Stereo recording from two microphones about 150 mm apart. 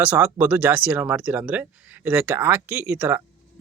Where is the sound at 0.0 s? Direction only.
10° right (ahead or behind).